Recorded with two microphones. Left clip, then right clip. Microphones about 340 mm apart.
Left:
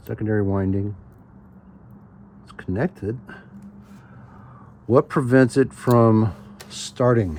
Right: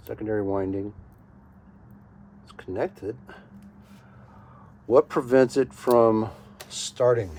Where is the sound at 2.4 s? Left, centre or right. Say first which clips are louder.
Left 2 dB; left.